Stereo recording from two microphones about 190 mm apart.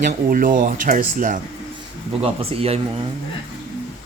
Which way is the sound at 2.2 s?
30° right (ahead or behind).